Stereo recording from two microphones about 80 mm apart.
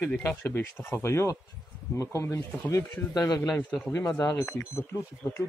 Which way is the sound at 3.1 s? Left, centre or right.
Left.